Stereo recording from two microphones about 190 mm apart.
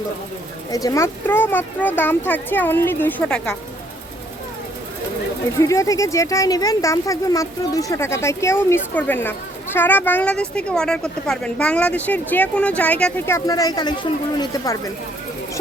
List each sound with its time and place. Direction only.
0.7 s speech: 20° left (ahead or behind)
5.5 s speech: 15° left (ahead or behind)